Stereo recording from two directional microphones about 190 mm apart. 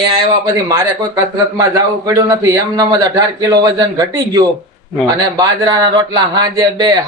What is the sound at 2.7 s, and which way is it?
Speech, 20° right (ahead or behind).